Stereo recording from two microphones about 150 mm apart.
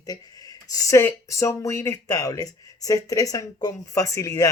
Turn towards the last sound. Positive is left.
turn(degrees=20)  # may be behind; listen again after turning